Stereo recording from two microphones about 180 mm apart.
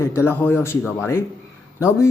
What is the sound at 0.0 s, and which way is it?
Speech, 15° left (ahead or behind).